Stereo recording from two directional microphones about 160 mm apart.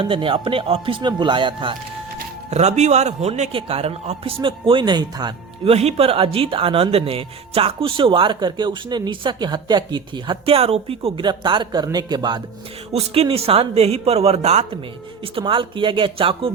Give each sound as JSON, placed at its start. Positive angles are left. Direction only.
{"t": 0.0, "sound": "speech", "side_deg": -35}
{"t": 2.5, "sound": "speech", "side_deg": -45}
{"t": 5.7, "sound": "speech", "side_deg": -40}
{"t": 12.9, "sound": "speech", "side_deg": -40}